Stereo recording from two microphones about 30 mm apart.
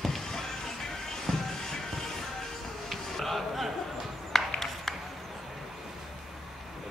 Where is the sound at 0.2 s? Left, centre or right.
Centre.